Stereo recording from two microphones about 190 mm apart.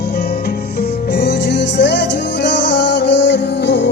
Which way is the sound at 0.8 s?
60° left (ahead or behind).